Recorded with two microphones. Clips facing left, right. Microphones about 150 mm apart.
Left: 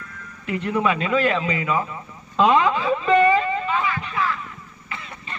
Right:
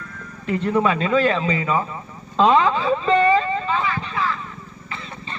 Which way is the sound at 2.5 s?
30° right (ahead or behind).